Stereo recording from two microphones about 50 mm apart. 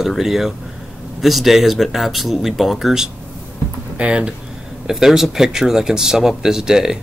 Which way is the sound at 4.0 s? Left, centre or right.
Right.